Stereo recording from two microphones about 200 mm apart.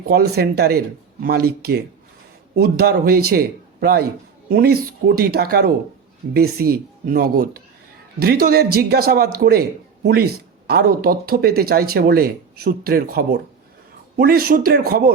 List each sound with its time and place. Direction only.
0.1 s speech: 50° right (ahead or behind)